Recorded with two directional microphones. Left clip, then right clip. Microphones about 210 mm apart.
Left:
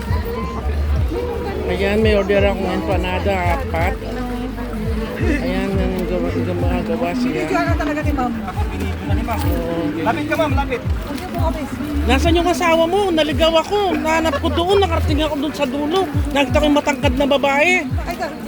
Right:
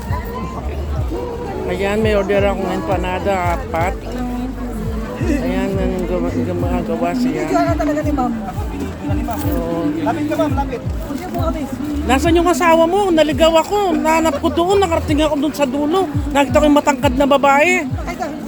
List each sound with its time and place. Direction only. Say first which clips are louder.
1.7 s speech: even; centre (ahead or behind)
5.5 s speech: right 2 dB; centre (ahead or behind)
7.3 s speech: right 3 dB; 55° right (ahead or behind)
12.0 s speech: right 2 dB; 5° right (ahead or behind)